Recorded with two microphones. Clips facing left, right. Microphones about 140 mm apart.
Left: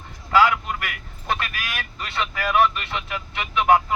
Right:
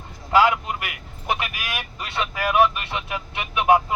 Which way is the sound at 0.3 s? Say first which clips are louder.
Even; 20° right (ahead or behind).